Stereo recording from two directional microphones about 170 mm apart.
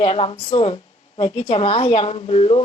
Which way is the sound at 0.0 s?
35° left (ahead or behind).